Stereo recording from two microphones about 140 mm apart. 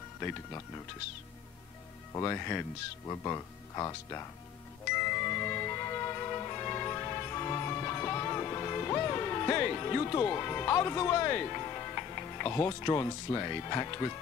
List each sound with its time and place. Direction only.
0.2 s speech: 15° left (ahead or behind)
2.1 s speech: 20° left (ahead or behind)
4.8 s music: 15° left (ahead or behind)